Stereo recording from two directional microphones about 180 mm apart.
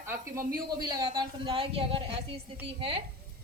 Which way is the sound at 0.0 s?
15° right (ahead or behind).